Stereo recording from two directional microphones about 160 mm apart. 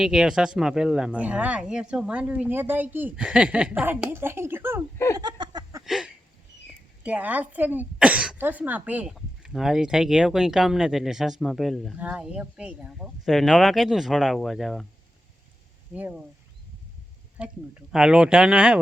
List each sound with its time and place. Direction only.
0.0 s speech: 5° right (ahead or behind)
5.1 s a sound: 25° right (ahead or behind)
5.8 s a sound: centre (ahead or behind)
7.0 s a woman's voice: 10° right (ahead or behind)
16.0 s speech: 10° right (ahead or behind)
17.4 s speech: 5° right (ahead or behind)